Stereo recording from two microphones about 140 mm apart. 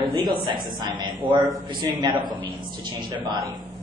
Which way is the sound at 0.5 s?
30° right (ahead or behind).